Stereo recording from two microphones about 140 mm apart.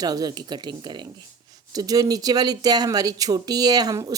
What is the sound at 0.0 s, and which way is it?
Speech, 30° right (ahead or behind).